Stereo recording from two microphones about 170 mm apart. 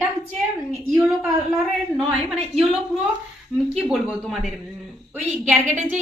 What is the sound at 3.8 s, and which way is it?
Speech, 5° right (ahead or behind).